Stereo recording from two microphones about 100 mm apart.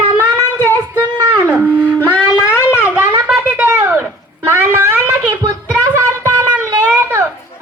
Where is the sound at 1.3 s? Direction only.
15° right (ahead or behind).